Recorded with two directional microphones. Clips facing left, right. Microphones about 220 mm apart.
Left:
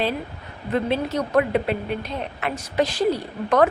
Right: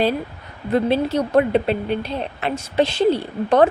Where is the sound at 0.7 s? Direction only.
30° right (ahead or behind).